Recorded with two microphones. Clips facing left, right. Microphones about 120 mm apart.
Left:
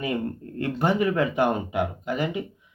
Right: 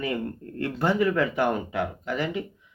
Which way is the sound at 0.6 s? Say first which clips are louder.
Even; 20° left (ahead or behind).